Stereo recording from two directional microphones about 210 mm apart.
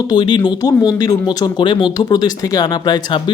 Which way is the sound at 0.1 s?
25° left (ahead or behind).